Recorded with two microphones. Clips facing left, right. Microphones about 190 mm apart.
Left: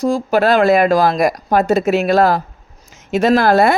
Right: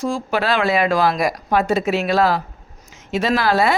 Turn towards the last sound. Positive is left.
turn(degrees=50)  # may be behind; listen again after turning